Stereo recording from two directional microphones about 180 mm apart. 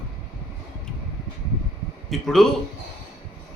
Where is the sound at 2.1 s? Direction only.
Centre (ahead or behind).